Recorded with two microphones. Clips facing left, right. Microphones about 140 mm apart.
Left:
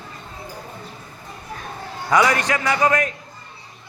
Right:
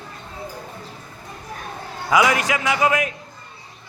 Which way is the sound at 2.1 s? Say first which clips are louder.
Even; 5° right (ahead or behind).